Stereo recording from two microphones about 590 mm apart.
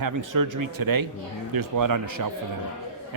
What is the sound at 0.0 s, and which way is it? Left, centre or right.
Speech, right.